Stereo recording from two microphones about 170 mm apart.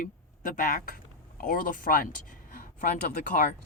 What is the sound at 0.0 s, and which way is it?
Speech, 55° left (ahead or behind).